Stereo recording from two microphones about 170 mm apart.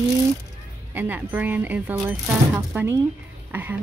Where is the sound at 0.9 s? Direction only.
10° right (ahead or behind).